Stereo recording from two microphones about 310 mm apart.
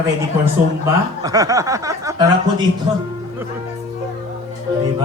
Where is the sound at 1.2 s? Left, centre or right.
Centre.